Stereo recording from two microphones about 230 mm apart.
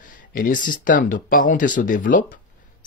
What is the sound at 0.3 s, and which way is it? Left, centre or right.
Speech, left.